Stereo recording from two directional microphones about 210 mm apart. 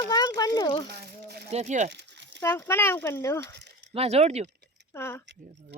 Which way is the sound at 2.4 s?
10° left (ahead or behind).